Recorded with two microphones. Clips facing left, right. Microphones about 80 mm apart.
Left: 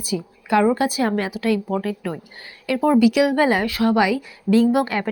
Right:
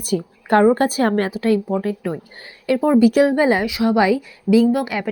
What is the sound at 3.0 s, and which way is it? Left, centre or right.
Speech, right.